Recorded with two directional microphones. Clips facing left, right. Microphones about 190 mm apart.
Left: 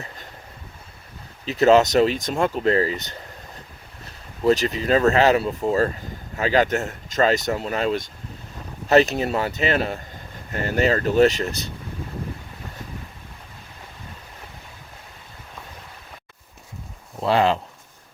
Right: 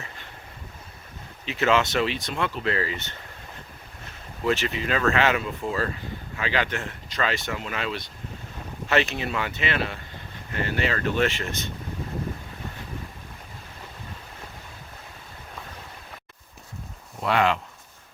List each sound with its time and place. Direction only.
1.5 s speech: 40° left (ahead or behind)
17.2 s speech: 30° left (ahead or behind)